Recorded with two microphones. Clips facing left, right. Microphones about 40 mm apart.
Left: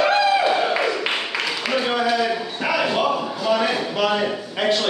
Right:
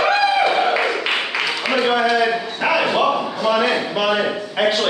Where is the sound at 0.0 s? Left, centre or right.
Centre.